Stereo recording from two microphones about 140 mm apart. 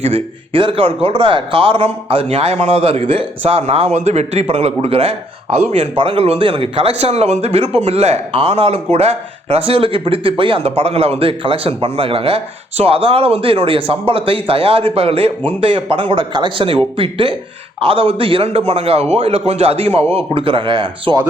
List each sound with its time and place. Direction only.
0.0 s speech: 45° right (ahead or behind)